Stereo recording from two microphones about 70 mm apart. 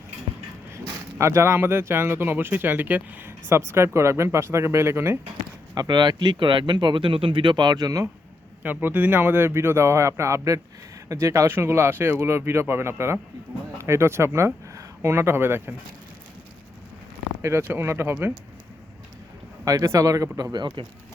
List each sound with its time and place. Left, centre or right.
1.2 s speech: right
3.7 s speech: right
5.7 s speech: right
8.6 s speech: right
12.2 s speech: right
17.6 s speech: right
19.6 s speech: right
20.5 s speech: right